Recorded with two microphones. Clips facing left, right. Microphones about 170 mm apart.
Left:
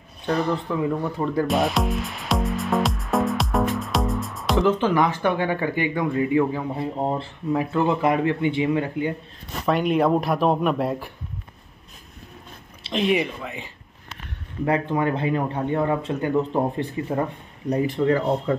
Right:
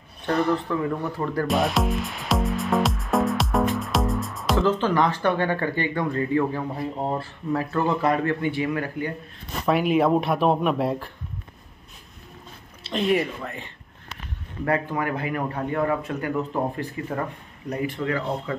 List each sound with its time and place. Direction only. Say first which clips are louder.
0.7 s speech: left 2 dB; 10° left (ahead or behind)
1.5 s music: left 1 dB; centre (ahead or behind)
4.6 s speech: left 2 dB; 15° left (ahead or behind)
9.7 s speech: even; centre (ahead or behind)
12.9 s speech: left 1 dB; 10° left (ahead or behind)
14.6 s speech: left 3 dB; 20° left (ahead or behind)
17.6 s speech: left 6 dB; 35° left (ahead or behind)